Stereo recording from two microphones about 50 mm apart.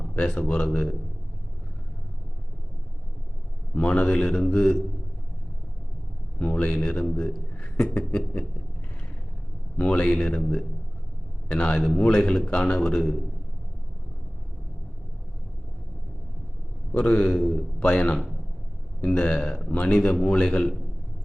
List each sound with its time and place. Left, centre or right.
0.2 s a man's voice: centre
3.8 s a man's voice: left
6.4 s a man's voice: left
9.7 s a man's voice: left
11.4 s a man's voice: centre
16.9 s a man's voice: left
17.7 s a man's voice: left